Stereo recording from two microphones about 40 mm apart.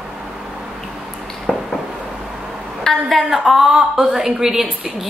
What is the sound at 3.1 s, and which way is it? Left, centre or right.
A woman's voice, centre.